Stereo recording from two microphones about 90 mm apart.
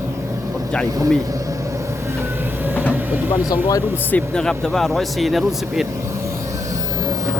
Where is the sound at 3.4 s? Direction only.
45° left (ahead or behind).